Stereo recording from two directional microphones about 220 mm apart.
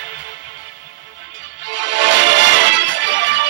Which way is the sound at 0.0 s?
55° right (ahead or behind).